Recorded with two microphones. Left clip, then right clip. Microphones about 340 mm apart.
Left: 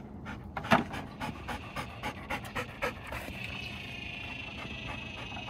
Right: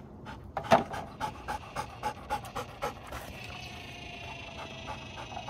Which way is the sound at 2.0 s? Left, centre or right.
Centre.